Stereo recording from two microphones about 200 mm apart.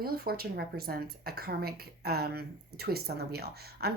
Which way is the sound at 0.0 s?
50° right (ahead or behind).